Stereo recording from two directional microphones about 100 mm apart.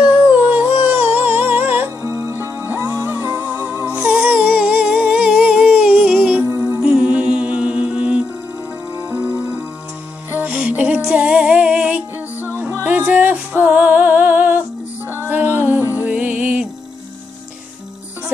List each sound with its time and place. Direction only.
0.3 s music: 15° right (ahead or behind)
3.9 s music: 10° right (ahead or behind)
6.5 s music: 25° right (ahead or behind)
6.8 s music: 10° right (ahead or behind)